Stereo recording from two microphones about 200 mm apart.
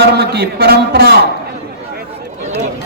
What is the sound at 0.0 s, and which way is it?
A man's voice, 55° right (ahead or behind).